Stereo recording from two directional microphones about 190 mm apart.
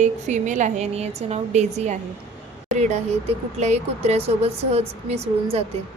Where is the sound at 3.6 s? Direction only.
35° right (ahead or behind).